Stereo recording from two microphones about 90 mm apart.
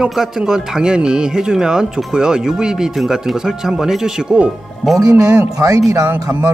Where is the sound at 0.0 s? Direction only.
5° right (ahead or behind).